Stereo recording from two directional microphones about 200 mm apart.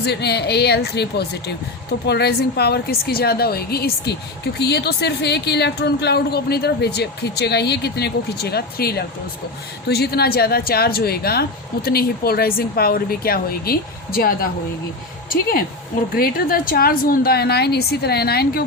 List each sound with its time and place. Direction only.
0.0 s a woman's voice: 55° left (ahead or behind)